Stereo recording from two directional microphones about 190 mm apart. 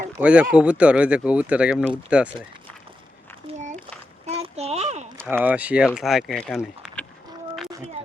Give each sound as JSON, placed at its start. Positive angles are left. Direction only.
{"t": 0.2, "sound": "speech", "side_deg": -5}
{"t": 3.4, "sound": "a sound", "side_deg": -40}
{"t": 5.3, "sound": "speech", "side_deg": -10}